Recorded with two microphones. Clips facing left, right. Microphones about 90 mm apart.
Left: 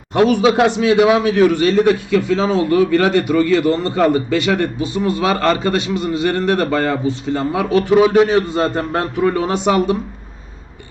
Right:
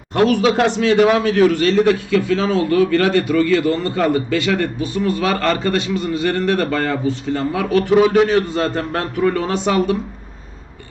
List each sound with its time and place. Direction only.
0.1 s a man's voice: 15° left (ahead or behind)